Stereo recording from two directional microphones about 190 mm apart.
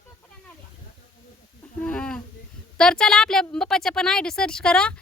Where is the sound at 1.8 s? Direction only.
5° left (ahead or behind).